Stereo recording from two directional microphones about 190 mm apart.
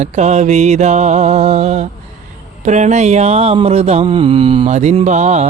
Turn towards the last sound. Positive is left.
turn(degrees=-35)  # may be behind; listen again after turning